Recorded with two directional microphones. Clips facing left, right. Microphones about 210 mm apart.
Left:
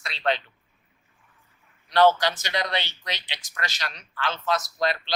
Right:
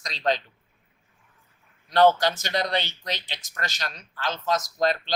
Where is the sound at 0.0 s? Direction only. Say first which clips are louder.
Right 1 dB; 40° right (ahead or behind).